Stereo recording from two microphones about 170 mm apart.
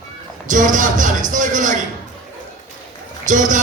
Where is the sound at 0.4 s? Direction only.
50° right (ahead or behind).